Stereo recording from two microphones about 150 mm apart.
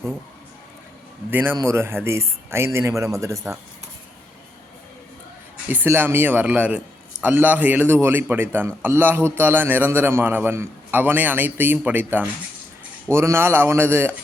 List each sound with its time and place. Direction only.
1.3 s a man's voice: 15° right (ahead or behind)
5.6 s a man's voice: 15° right (ahead or behind)